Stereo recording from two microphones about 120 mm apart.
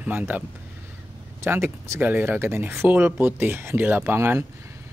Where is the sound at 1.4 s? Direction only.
20° right (ahead or behind).